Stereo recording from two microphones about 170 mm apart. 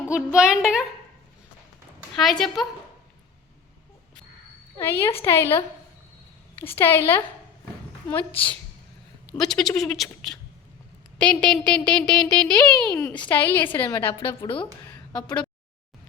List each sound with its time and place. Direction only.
0.1 s a child's voice: 5° right (ahead or behind)
2.1 s a child's voice: centre (ahead or behind)
4.8 s a woman's voice: 15° left (ahead or behind)
6.7 s a woman's voice: 10° left (ahead or behind)
9.4 s a child's voice: centre (ahead or behind)
14.4 s speech: 30° left (ahead or behind)